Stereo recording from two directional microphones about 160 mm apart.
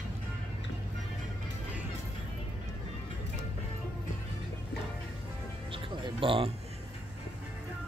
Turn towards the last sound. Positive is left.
turn(degrees=-35)  # may be behind; listen again after turning